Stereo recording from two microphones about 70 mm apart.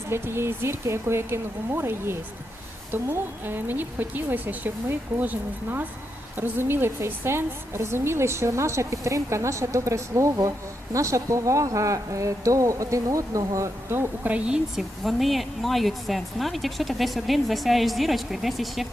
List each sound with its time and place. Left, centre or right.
0.1 s a woman's voice: right
13.9 s speech: right
14.3 s speech: centre
14.8 s speech: centre